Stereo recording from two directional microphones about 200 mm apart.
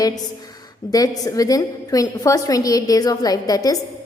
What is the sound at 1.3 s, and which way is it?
A woman's voice, 20° left (ahead or behind).